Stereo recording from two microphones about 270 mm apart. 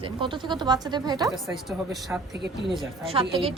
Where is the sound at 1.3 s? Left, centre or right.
Centre.